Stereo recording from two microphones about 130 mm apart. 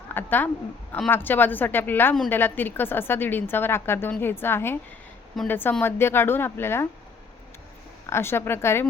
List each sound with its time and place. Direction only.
0.1 s a woman's voice: 15° left (ahead or behind)
8.1 s speech: 20° left (ahead or behind)